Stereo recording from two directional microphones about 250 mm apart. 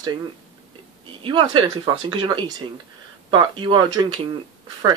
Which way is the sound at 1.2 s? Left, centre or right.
Centre.